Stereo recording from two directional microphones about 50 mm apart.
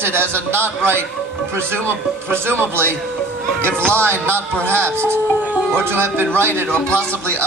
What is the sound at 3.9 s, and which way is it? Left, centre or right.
Speech, right.